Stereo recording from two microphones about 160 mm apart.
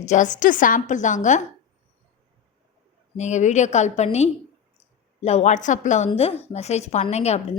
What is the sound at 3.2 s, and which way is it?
A woman's voice, 45° left (ahead or behind).